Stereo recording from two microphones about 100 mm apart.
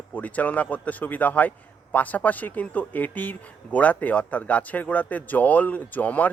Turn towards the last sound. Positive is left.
turn(degrees=15)  # may be behind; listen again after turning